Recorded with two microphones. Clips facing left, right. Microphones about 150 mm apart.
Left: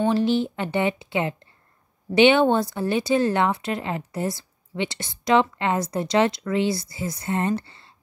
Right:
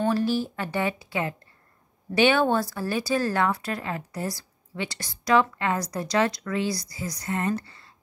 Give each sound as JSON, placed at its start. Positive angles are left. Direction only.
{"t": 0.1, "sound": "speech", "side_deg": 25}